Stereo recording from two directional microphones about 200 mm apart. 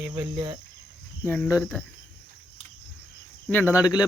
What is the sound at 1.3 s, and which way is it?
Speech, 10° left (ahead or behind).